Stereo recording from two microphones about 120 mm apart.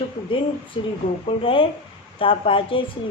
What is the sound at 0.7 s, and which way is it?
A woman's voice, 45° left (ahead or behind).